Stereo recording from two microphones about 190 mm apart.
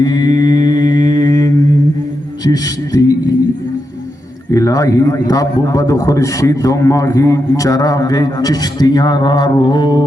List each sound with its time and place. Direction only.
0.0 s mantra: 20° left (ahead or behind)
2.4 s speech: 20° left (ahead or behind)
4.5 s a man's voice: 20° left (ahead or behind)